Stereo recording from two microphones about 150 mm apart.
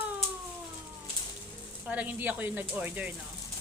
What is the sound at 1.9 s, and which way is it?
A woman's voice, 10° right (ahead or behind).